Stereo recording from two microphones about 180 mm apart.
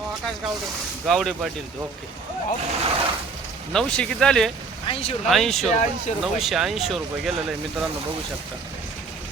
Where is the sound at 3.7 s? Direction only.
5° left (ahead or behind).